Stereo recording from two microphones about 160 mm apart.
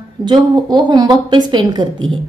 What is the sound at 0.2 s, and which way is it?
A woman's voice, 30° right (ahead or behind).